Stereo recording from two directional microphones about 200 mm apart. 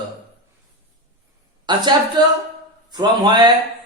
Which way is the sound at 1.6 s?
20° right (ahead or behind).